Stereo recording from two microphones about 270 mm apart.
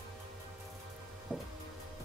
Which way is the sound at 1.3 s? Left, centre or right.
Centre.